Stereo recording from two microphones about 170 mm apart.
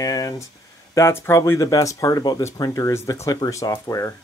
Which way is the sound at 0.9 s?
15° left (ahead or behind).